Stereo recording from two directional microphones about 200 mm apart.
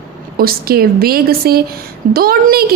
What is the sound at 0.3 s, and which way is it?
A woman's voice, 50° right (ahead or behind).